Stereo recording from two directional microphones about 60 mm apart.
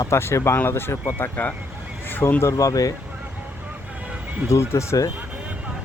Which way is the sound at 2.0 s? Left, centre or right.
Left.